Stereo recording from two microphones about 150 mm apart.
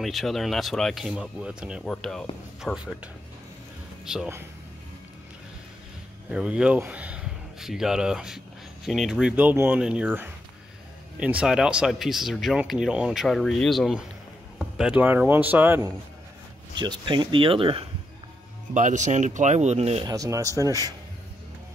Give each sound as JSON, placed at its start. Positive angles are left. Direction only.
{"t": 0.0, "sound": "speech", "side_deg": 0}
{"t": 6.3, "sound": "speech", "side_deg": -5}
{"t": 16.7, "sound": "speech", "side_deg": -30}
{"t": 18.7, "sound": "speech", "side_deg": -55}
{"t": 20.1, "sound": "speech", "side_deg": -25}